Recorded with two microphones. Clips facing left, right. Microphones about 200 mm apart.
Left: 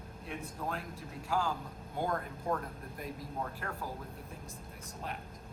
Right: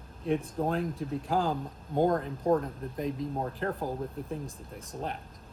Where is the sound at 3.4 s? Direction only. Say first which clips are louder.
Right 8 dB; 30° right (ahead or behind).